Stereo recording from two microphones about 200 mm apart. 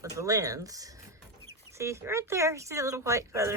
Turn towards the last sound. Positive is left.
turn(degrees=-15)  # may be behind; listen again after turning